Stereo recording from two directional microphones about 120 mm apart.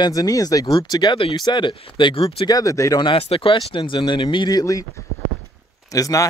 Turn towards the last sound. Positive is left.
turn(degrees=30)  # may be behind; listen again after turning